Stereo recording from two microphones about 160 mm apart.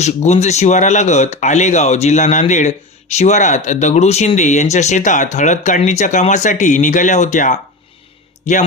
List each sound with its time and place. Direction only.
0.0 s speech: 45° left (ahead or behind)